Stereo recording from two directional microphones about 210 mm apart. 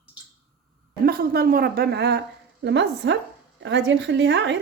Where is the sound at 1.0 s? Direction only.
45° right (ahead or behind).